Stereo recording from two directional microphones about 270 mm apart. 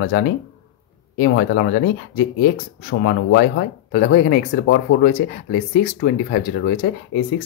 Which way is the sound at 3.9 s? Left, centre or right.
Left.